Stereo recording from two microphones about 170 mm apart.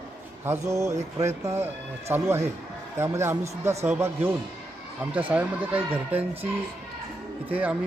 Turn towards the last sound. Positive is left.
turn(degrees=-10)  # may be behind; listen again after turning